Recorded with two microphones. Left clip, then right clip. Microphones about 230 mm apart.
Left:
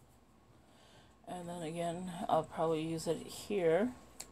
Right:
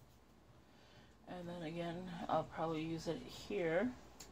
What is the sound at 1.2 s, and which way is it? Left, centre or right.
Speech, left.